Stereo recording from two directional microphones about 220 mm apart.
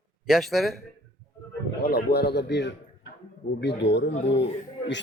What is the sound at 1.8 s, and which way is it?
Speech, 45° left (ahead or behind).